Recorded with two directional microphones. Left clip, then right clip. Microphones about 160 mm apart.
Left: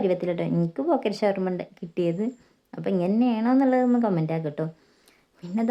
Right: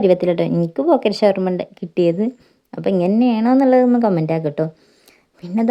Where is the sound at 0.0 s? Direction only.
30° right (ahead or behind).